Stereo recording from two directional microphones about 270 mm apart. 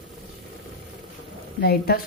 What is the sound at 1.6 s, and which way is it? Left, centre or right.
Speech, left.